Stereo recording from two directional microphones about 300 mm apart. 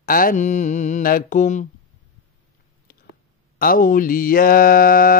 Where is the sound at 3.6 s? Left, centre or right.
Left.